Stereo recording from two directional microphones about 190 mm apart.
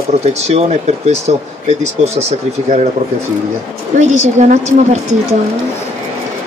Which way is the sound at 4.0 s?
40° right (ahead or behind).